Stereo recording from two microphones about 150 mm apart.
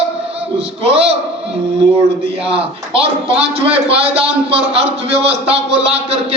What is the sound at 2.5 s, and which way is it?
A man's voice, 40° right (ahead or behind).